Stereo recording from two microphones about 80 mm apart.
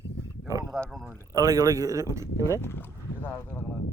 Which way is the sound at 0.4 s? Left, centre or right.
Right.